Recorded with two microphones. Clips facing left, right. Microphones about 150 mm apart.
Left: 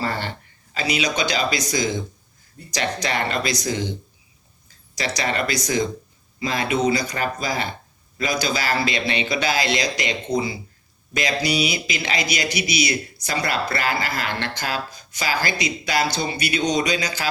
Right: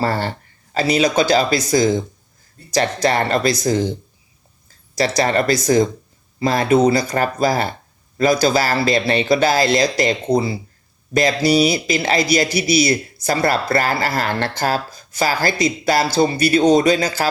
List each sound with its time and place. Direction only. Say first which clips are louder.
0.0 s a man's voice: right 6 dB; 40° right (ahead or behind)
4.9 s a man's voice: right 7 dB; 45° right (ahead or behind)
16.6 s a man's voice: right 9 dB; 50° right (ahead or behind)